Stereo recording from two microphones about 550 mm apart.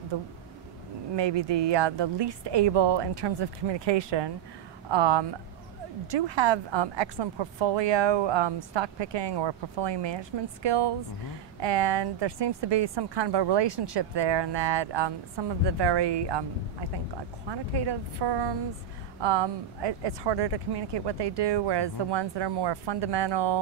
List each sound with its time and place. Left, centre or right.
0.1 s a woman's voice: right
17.5 s a woman's voice: right